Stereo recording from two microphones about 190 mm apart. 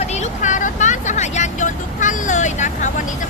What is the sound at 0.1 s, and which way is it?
Vehicle, 40° left (ahead or behind).